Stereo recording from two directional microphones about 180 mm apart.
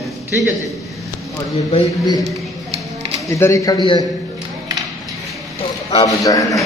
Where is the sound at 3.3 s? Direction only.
15° left (ahead or behind).